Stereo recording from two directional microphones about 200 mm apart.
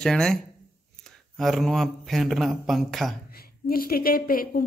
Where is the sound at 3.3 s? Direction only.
50° left (ahead or behind).